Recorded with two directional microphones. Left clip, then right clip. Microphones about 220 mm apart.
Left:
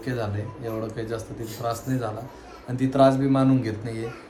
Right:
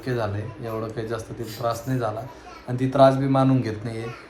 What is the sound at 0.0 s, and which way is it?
Speech, 5° left (ahead or behind).